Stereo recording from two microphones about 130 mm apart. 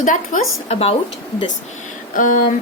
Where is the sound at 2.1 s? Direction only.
90° left.